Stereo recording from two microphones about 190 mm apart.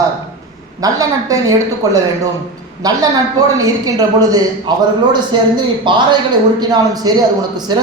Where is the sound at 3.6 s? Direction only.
20° right (ahead or behind).